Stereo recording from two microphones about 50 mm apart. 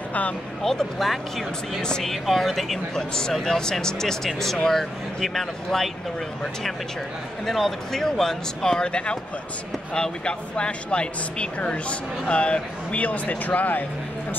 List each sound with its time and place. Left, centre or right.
0.6 s speech: centre
1.8 s speech: centre
2.2 s speech: centre
3.0 s speech: centre
7.4 s speech: centre
10.2 s speech: centre; by 13.8 s left